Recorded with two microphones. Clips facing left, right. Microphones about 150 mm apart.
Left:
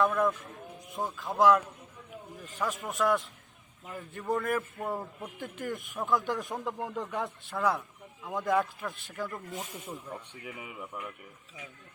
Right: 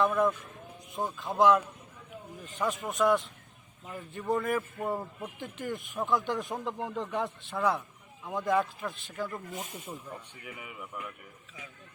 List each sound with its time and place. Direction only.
0.0 s a man's voice: centre (ahead or behind)
10.1 s speech: 20° left (ahead or behind)